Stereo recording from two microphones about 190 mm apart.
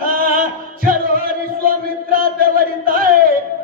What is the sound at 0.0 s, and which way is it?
Chant, 50° right (ahead or behind).